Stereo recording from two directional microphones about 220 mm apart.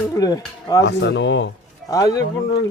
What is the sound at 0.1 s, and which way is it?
Speech, 15° left (ahead or behind).